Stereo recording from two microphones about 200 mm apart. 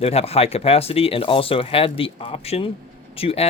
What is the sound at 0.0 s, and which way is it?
Speech, 30° left (ahead or behind).